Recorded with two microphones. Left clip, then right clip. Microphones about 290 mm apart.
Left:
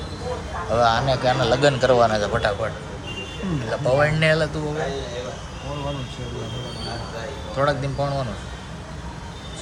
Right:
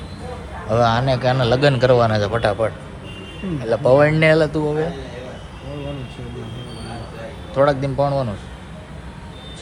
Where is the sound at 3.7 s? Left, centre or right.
Centre.